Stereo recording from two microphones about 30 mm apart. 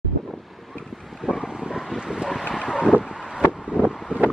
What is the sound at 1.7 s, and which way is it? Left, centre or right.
Vehicle, right.